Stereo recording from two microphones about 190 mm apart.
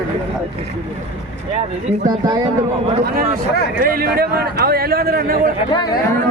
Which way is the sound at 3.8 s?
50° right (ahead or behind).